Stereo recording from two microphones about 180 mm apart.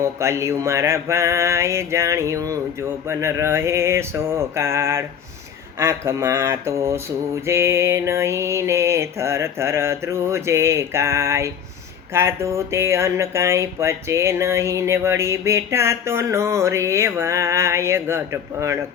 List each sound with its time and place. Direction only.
0.0 s speech: 15° right (ahead or behind)